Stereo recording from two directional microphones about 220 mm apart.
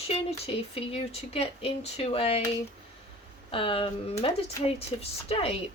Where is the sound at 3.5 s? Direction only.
25° left (ahead or behind).